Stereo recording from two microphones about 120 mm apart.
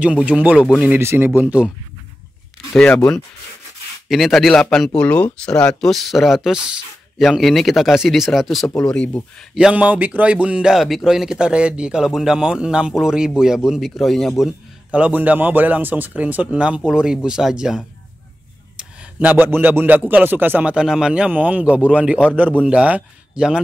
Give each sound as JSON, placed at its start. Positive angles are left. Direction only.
{"t": 0.0, "sound": "speech", "side_deg": -10}
{"t": 2.7, "sound": "speech", "side_deg": 10}
{"t": 4.1, "sound": "speech", "side_deg": 0}
{"t": 9.6, "sound": "speech", "side_deg": -10}
{"t": 14.9, "sound": "speech", "side_deg": -10}